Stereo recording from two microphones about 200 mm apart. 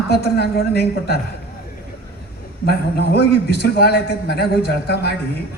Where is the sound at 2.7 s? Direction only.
55° left (ahead or behind).